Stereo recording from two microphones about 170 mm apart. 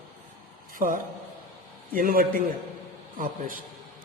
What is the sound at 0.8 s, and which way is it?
A man's voice, 55° right (ahead or behind).